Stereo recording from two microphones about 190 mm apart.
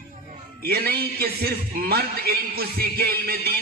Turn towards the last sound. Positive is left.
turn(degrees=-55)  # may be behind; listen again after turning